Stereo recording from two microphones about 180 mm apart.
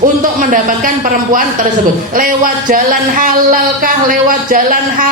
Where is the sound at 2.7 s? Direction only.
50° right (ahead or behind).